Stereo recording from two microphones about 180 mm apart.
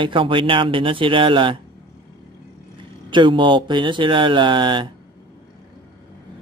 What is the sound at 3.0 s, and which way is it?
Speech, 25° right (ahead or behind).